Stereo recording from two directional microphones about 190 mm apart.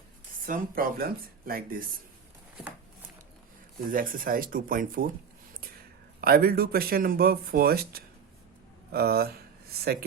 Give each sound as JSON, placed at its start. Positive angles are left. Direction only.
{"t": 0.4, "sound": "speech", "side_deg": -50}
{"t": 3.9, "sound": "speech", "side_deg": -50}
{"t": 6.2, "sound": "speech", "side_deg": -55}